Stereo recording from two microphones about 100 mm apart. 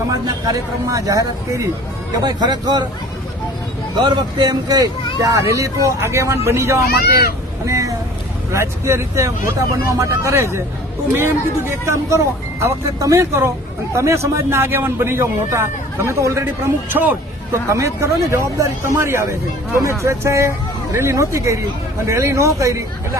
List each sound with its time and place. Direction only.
0.1 s a man's voice: 35° right (ahead or behind)
4.0 s a man's voice: 45° right (ahead or behind); by 16.0 s 25° right (ahead or behind)
17.7 s a man's voice: 30° right (ahead or behind)